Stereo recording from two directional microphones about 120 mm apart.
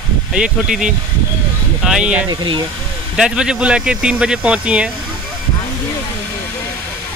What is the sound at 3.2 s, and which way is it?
Speech, 5° right (ahead or behind).